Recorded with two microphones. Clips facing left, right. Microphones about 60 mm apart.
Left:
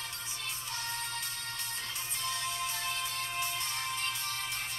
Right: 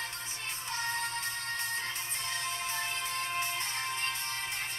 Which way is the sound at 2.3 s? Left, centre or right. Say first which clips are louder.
Left 1 dB; right.